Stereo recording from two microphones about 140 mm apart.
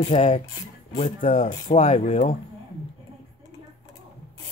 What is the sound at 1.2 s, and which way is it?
Speech, 75° left (ahead or behind).